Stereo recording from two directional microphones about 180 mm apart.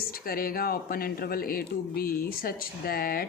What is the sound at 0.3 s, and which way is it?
Speech, 55° left (ahead or behind).